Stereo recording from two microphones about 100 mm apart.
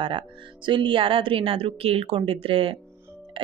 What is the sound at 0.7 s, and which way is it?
A woman's voice, 55° right (ahead or behind).